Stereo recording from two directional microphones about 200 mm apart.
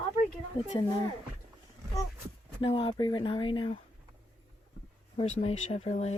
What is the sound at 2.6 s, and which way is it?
Speech, 25° left (ahead or behind).